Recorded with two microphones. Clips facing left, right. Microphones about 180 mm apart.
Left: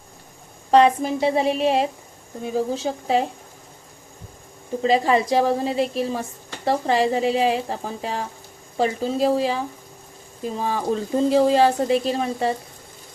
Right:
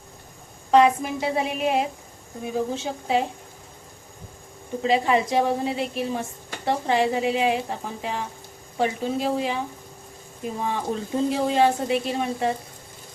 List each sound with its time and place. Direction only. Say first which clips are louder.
0.7 s a woman's voice: left 2 dB; 35° left (ahead or behind)
4.8 s a woman's voice: left 2 dB; 35° left (ahead or behind)
10.6 s a woman's voice: left 4 dB; 35° left (ahead or behind)